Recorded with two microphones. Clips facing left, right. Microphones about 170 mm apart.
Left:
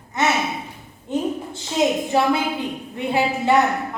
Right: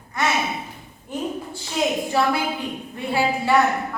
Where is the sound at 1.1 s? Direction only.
20° left (ahead or behind).